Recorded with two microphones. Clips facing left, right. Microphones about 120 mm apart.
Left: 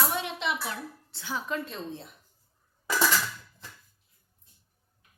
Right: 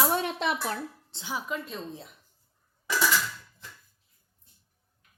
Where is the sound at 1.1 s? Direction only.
15° right (ahead or behind).